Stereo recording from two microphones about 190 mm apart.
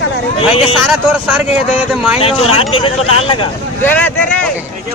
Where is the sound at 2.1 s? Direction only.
30° left (ahead or behind).